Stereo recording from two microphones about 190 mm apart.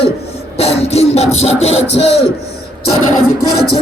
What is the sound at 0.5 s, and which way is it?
Music, 35° left (ahead or behind).